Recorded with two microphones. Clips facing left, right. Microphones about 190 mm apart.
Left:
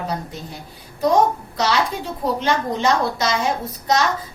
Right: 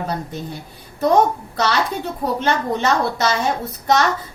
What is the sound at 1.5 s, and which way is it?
Speech, 65° right (ahead or behind).